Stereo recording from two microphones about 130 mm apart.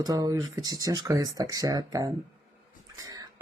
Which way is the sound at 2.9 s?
30° right (ahead or behind).